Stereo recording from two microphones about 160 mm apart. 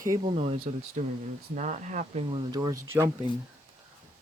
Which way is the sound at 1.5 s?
50° right (ahead or behind).